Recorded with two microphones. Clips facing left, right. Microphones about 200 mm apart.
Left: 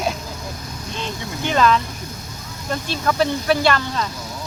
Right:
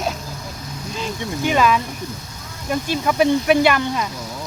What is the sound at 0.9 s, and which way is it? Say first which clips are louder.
Speech: right 3 dB; 5° right (ahead or behind).